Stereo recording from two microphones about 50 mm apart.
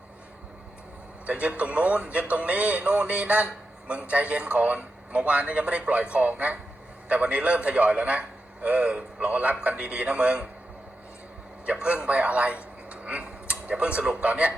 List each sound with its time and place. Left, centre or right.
1.3 s a man's voice: right
9.3 s a man's voice: right
11.6 s a man's voice: right